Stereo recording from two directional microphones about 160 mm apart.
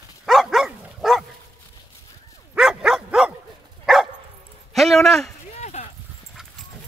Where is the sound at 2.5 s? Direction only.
5° right (ahead or behind).